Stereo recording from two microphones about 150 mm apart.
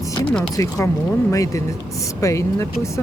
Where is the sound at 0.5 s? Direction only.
20° left (ahead or behind).